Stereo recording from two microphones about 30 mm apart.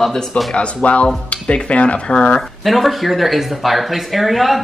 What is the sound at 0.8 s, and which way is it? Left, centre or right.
Speech, left.